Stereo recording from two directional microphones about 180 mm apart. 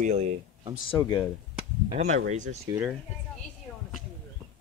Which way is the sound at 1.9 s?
40° right (ahead or behind).